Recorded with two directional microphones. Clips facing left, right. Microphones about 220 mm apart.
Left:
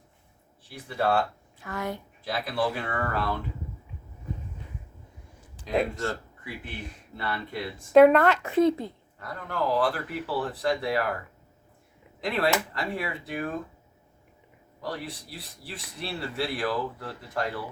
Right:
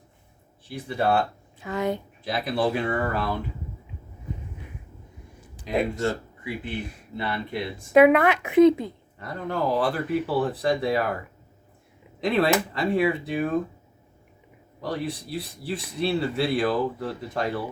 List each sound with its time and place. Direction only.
0.9 s speech: 20° right (ahead or behind)
5.6 s speech: 20° right (ahead or behind)
12.2 s speech: 20° right (ahead or behind)
14.8 s speech: 20° right (ahead or behind)